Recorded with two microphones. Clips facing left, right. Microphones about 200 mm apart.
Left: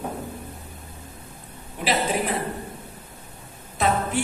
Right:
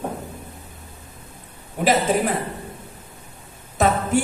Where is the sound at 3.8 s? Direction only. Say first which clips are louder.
Right 3 dB; 45° right (ahead or behind).